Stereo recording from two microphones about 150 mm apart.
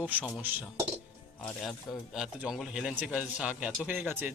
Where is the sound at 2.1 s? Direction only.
5° right (ahead or behind).